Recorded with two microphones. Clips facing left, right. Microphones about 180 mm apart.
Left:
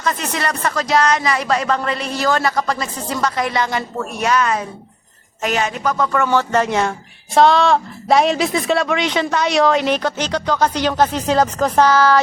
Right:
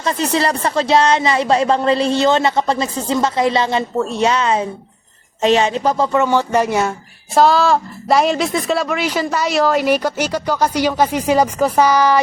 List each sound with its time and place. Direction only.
0.0 s a woman's voice: 30° right (ahead or behind); by 12.2 s 15° right (ahead or behind)